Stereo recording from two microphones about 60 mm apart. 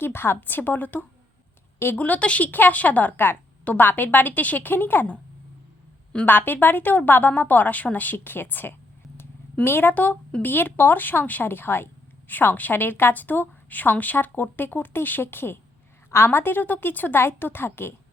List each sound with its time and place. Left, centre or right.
0.0 s a woman's voice: left
6.2 s a woman's voice: left